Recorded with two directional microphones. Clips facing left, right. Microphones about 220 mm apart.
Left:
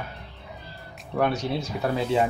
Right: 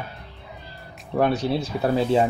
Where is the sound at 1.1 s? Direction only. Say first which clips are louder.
Right 4 dB; 35° right (ahead or behind).